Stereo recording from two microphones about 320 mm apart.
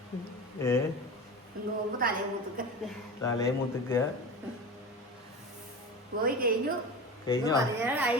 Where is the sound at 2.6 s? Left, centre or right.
Right.